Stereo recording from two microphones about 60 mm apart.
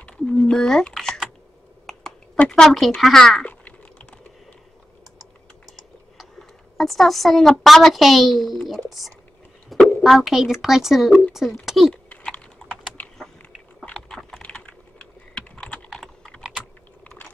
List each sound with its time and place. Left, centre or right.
0.0 s a sound: centre
2.4 s a child's voice: centre
3.4 s typing: left
6.8 s a child's voice: centre
9.7 s a sound: centre
10.0 s a child's voice: centre
12.1 s typing: left
13.9 s typing: centre
14.4 s typing: left